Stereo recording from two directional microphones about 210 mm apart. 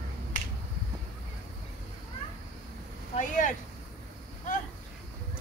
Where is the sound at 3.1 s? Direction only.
35° left (ahead or behind).